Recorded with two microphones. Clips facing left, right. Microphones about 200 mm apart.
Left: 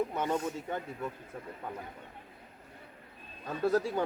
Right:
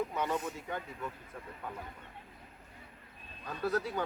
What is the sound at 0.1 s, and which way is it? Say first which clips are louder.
Speech: left 3 dB; 25° left (ahead or behind).